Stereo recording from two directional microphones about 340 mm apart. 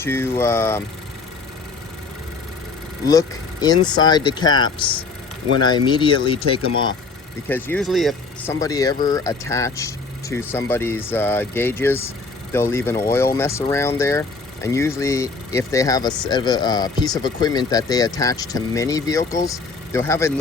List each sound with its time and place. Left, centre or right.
0.0 s speech: centre
3.1 s speech: centre